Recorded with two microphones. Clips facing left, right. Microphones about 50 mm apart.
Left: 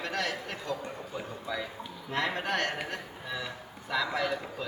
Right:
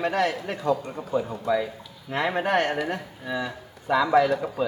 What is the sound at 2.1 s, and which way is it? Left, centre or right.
A man's voice, centre.